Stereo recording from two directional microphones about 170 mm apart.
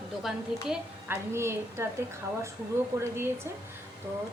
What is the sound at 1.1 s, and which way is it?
Speech, 15° right (ahead or behind).